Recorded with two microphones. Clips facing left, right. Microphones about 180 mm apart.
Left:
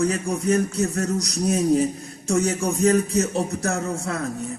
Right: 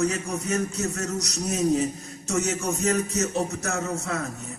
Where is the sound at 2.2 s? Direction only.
30° left (ahead or behind).